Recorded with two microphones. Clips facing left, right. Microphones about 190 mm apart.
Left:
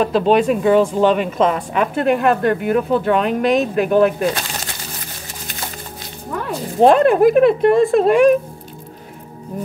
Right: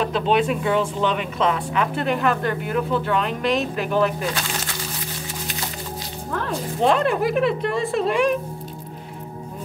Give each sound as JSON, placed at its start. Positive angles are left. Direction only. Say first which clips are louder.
{"t": 0.0, "sound": "a woman's voice", "louder": "left 6 dB", "side_deg": 45}
{"t": 6.8, "sound": "a woman's voice", "louder": "left 9 dB", "side_deg": 50}